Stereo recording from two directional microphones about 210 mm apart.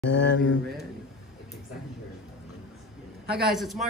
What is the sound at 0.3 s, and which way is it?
Speech, 65° left (ahead or behind).